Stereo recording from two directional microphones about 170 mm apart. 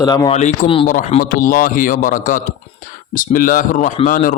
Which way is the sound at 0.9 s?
50° left (ahead or behind).